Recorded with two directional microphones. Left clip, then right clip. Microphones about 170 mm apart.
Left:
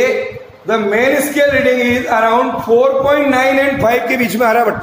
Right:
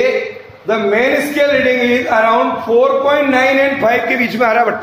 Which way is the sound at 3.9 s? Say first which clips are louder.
Even; 60° left (ahead or behind).